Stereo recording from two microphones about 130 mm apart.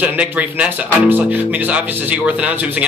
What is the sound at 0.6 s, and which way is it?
Speech, 15° right (ahead or behind).